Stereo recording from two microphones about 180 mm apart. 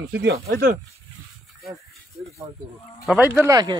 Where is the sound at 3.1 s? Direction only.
5° right (ahead or behind).